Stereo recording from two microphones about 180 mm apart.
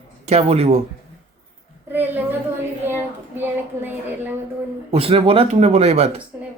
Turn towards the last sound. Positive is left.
turn(degrees=-35)  # may be behind; listen again after turning